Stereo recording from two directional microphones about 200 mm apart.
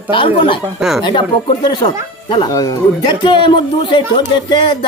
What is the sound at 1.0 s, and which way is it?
Speech, 25° left (ahead or behind).